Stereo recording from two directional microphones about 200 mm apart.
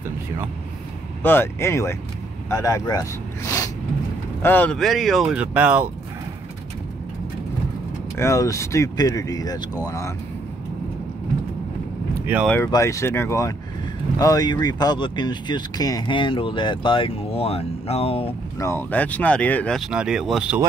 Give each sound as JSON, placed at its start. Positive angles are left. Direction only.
{"t": 1.2, "sound": "speech", "side_deg": 10}
{"t": 8.2, "sound": "speech", "side_deg": 15}
{"t": 12.4, "sound": "speech", "side_deg": 10}
{"t": 18.6, "sound": "speech", "side_deg": 10}